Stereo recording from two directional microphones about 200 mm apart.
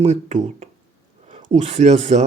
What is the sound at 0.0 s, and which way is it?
Speech, 35° right (ahead or behind).